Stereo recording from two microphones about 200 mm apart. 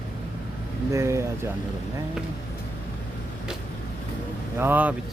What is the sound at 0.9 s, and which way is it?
Speech, 15° right (ahead or behind).